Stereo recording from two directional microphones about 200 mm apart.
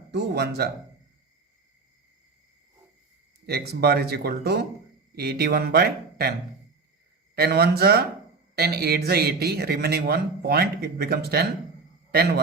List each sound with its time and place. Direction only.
0.1 s speech: 55° right (ahead or behind)
3.4 s speech: 50° right (ahead or behind)
7.3 s a man's voice: 50° right (ahead or behind)